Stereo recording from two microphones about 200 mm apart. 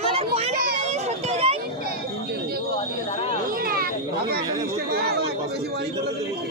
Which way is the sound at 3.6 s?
50° right (ahead or behind).